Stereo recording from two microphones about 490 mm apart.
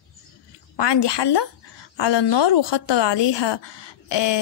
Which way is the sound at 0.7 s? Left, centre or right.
Left.